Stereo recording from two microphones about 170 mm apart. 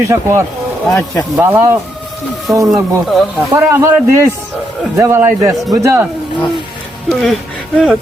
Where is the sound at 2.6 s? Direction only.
Centre (ahead or behind).